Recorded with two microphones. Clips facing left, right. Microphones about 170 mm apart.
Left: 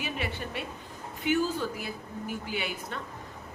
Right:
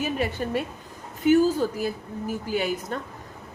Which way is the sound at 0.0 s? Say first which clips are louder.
Right 8 dB; 40° right (ahead or behind).